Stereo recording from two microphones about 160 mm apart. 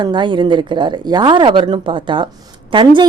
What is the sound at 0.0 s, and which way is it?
A woman's voice, 30° right (ahead or behind).